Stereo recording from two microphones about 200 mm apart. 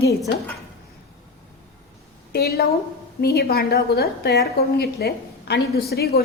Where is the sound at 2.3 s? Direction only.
50° left (ahead or behind).